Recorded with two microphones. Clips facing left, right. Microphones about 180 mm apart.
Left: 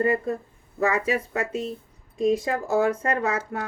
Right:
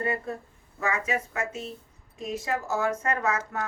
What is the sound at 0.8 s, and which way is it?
Speech, 35° left (ahead or behind).